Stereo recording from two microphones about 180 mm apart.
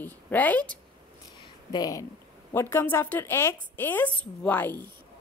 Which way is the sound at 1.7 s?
20° left (ahead or behind).